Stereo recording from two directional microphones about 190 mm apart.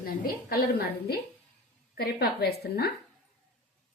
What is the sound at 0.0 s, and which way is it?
A woman's voice, 55° left (ahead or behind).